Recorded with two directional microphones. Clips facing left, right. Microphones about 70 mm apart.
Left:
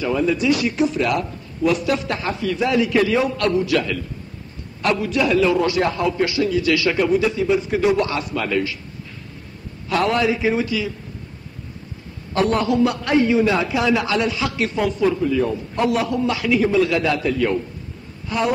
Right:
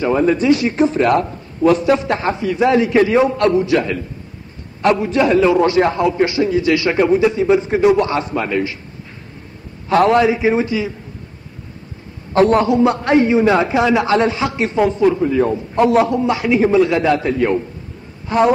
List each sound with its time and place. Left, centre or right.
0.0 s a man's voice: right
1.9 s a man's voice: right
9.8 s a man's voice: right
12.4 s a man's voice: right